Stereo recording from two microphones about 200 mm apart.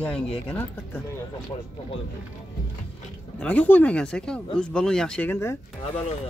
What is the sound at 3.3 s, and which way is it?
Speech, 5° left (ahead or behind).